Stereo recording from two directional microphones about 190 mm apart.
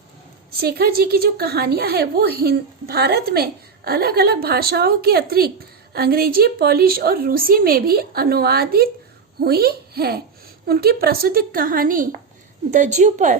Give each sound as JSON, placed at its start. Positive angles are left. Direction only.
{"t": 0.6, "sound": "a woman's voice", "side_deg": -55}